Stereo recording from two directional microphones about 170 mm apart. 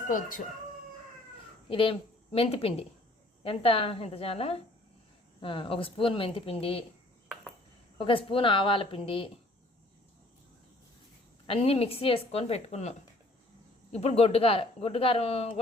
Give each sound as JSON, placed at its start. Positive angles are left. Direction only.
{"t": 0.1, "sound": "speech", "side_deg": 55}
{"t": 1.7, "sound": "speech", "side_deg": 30}
{"t": 7.9, "sound": "speech", "side_deg": 30}
{"t": 11.4, "sound": "speech", "side_deg": 35}